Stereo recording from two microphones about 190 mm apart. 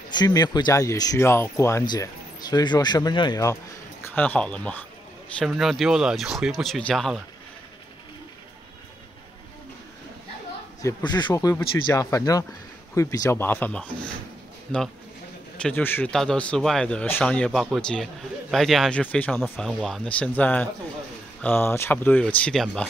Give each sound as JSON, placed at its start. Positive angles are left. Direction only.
{"t": 0.1, "sound": "speech", "side_deg": 20}
{"t": 4.1, "sound": "a man's voice", "side_deg": 10}
{"t": 10.8, "sound": "a man's voice", "side_deg": 15}